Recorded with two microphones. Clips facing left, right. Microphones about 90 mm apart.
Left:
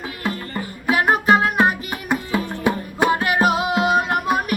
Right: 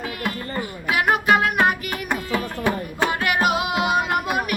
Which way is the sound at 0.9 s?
35° left (ahead or behind).